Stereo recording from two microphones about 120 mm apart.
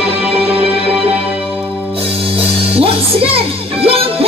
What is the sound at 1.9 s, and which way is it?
Music, 50° right (ahead or behind).